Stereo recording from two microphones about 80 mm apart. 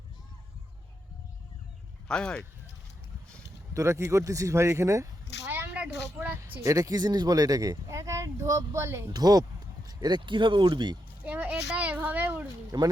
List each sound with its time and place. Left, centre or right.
2.0 s speech: centre
3.8 s speech: right
5.5 s a sound: right
6.6 s speech: right
9.1 s speech: right
9.8 s a sound: right
10.2 s speech: right
11.2 s a sound: centre
12.7 s speech: right